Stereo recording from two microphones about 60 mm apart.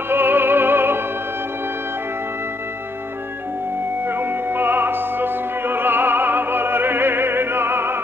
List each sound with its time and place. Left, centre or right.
0.1 s music: right
4.0 s opera: right